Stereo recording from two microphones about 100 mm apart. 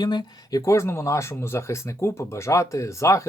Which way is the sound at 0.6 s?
30° left (ahead or behind).